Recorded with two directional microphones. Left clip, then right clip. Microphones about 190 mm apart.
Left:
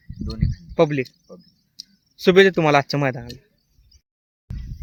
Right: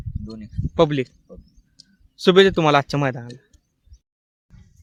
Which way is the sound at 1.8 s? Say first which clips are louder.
Left 10 dB; 60° left (ahead or behind).